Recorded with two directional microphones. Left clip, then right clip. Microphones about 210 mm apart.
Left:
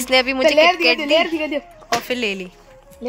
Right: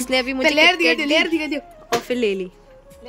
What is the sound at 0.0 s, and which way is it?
A woman's voice, 10° right (ahead or behind).